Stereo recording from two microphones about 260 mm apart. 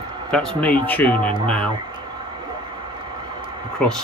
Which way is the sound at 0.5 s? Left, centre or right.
Centre.